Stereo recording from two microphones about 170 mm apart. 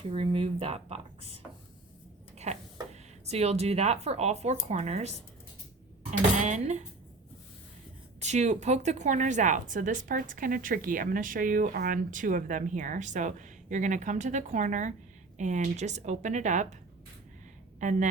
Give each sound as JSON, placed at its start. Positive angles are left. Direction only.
{"t": 0.0, "sound": "speech", "side_deg": -35}
{"t": 2.5, "sound": "a sound", "side_deg": -40}
{"t": 2.9, "sound": "speech", "side_deg": -40}
{"t": 8.2, "sound": "a woman's voice", "side_deg": -45}
{"t": 17.7, "sound": "a woman's voice", "side_deg": -45}